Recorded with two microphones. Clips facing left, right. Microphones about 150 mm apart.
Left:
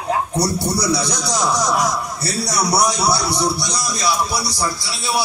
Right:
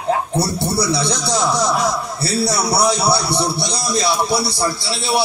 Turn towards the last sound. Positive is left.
turn(degrees=-25)  # may be behind; listen again after turning